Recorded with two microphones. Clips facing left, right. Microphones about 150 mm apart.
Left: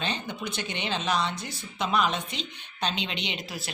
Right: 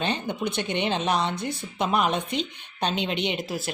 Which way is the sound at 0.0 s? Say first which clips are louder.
Right 5 dB; 55° right (ahead or behind).